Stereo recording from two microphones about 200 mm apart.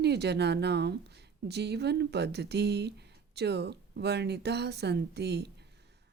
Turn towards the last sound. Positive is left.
turn(degrees=-55)  # may be behind; listen again after turning